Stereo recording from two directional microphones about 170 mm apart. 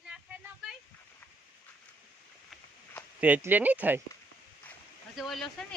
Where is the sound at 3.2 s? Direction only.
10° right (ahead or behind).